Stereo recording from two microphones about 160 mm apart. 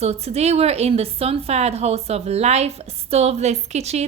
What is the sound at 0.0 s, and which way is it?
A woman's voice, 40° right (ahead or behind).